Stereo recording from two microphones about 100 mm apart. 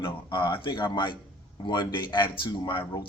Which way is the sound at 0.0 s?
50° left (ahead or behind).